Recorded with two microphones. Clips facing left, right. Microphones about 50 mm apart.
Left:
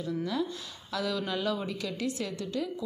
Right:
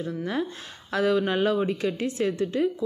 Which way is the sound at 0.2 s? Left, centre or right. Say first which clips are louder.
Right 3 dB; right.